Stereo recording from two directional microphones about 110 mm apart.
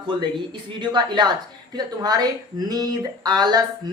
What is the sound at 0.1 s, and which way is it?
Speech, 45° right (ahead or behind).